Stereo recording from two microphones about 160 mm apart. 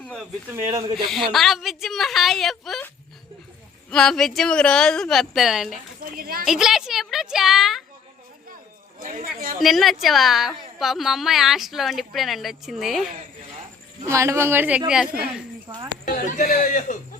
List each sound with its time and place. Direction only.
0.0 s a sound: 5° left (ahead or behind)
0.5 s speech: 20° right (ahead or behind)
1.0 s a woman's voice: centre (ahead or behind)
3.8 s a woman's voice: 5° left (ahead or behind)
6.0 s speech: 65° right (ahead or behind)
6.4 s a woman's voice: centre (ahead or behind)
9.0 s speech: 55° right (ahead or behind)
9.6 s a woman's voice: centre (ahead or behind)
14.1 s speech: 15° right (ahead or behind)
16.0 s speech: 60° left (ahead or behind)